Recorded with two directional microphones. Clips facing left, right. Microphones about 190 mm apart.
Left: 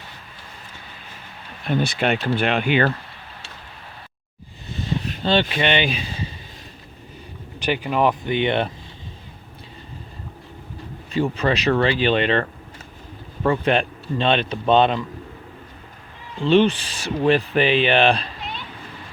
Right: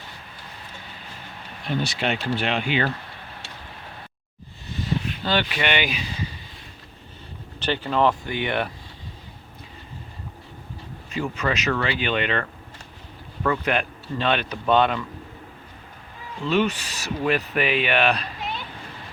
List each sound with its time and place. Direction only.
1.8 s speech: 55° left (ahead or behind)
5.2 s speech: 25° left (ahead or behind)
7.6 s speech: 15° left (ahead or behind)
11.1 s speech: 35° left (ahead or behind)
16.4 s speech: 30° left (ahead or behind)